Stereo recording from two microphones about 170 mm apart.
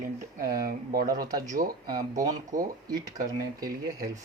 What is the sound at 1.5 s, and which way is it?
Speech, 55° right (ahead or behind).